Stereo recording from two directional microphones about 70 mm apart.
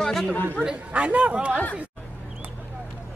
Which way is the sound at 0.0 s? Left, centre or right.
Centre.